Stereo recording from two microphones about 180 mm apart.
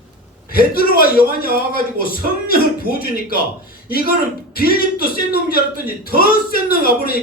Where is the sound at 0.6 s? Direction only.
55° left (ahead or behind).